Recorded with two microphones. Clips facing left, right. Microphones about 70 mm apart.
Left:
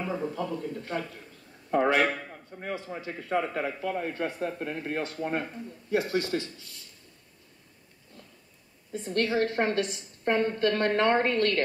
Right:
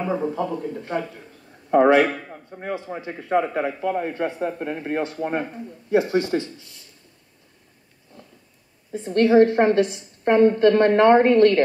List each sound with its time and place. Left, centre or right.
0.0 s speech: right
2.0 s a man's voice: centre
2.3 s speech: right
8.9 s speech: right